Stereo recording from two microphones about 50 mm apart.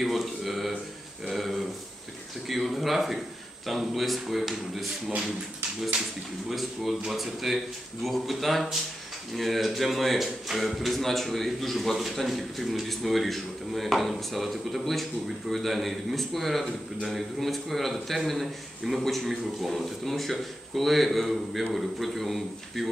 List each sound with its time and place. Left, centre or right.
0.0 s a sound: centre
1.2 s a man's voice: centre
6.5 s a man's voice: centre